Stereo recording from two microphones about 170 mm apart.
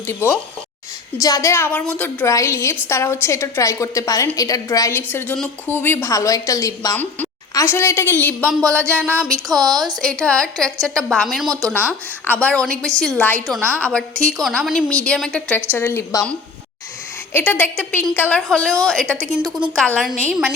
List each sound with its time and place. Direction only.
0.1 s a woman's voice: 15° left (ahead or behind)
9.0 s a sound: 15° right (ahead or behind)
10.0 s a woman's voice: 5° left (ahead or behind)
11.4 s speech: 20° right (ahead or behind)
12.2 s a woman's voice: 10° left (ahead or behind)
17.3 s a woman's voice: 10° left (ahead or behind)